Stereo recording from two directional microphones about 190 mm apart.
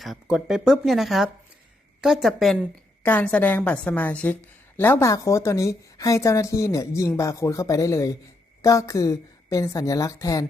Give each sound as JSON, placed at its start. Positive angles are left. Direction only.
{"t": 0.0, "sound": "a woman's voice", "side_deg": 0}